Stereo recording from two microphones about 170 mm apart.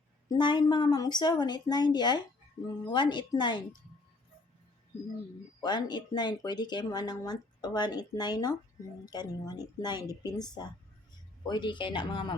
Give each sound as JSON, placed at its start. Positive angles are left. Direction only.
{"t": 0.3, "sound": "speech", "side_deg": 25}
{"t": 5.5, "sound": "speech", "side_deg": 25}